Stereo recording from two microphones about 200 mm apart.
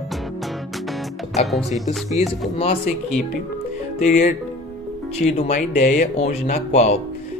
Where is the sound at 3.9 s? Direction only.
35° left (ahead or behind).